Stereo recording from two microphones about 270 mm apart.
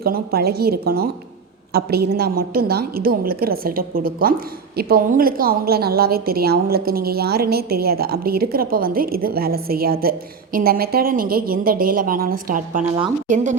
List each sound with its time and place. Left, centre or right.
0.0 s a woman's voice: right